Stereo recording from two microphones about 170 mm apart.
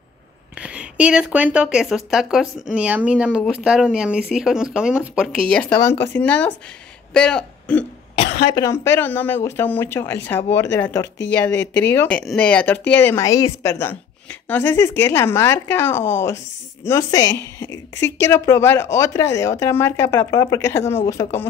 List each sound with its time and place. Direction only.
0.6 s speech: 5° right (ahead or behind)
8.5 s speech: 20° left (ahead or behind)